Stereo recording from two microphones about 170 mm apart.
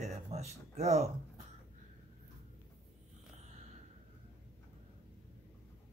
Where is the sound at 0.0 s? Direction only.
40° right (ahead or behind).